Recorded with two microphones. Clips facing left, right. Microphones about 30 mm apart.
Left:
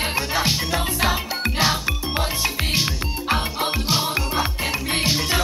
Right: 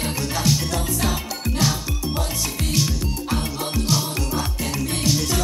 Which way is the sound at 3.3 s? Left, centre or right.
Left.